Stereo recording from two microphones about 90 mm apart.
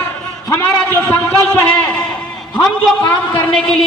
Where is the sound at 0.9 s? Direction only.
25° left (ahead or behind).